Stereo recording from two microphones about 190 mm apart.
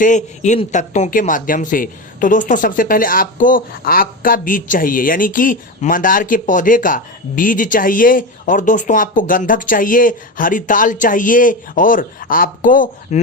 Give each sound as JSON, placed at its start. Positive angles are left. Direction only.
{"t": 0.0, "sound": "speech", "side_deg": 40}